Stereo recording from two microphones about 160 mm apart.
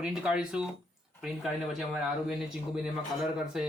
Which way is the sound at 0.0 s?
5° right (ahead or behind).